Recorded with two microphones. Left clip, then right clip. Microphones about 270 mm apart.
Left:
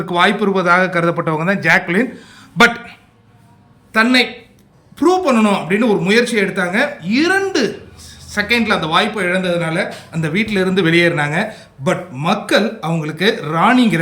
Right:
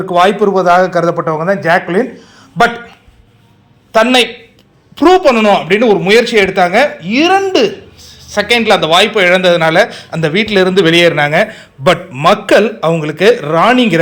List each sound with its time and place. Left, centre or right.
0.1 s speech: centre
0.4 s a man's voice: centre
4.9 s speech: centre